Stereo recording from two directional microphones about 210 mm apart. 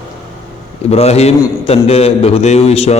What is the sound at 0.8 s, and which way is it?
A man's voice, 30° left (ahead or behind).